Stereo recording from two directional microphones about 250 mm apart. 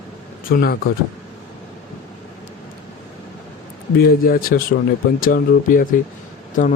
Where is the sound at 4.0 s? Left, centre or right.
Left.